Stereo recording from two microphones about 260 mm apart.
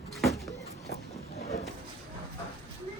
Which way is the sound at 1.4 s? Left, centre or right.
Left.